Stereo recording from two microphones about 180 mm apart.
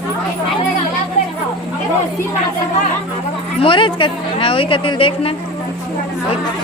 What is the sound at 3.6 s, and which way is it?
A woman's voice, 30° left (ahead or behind).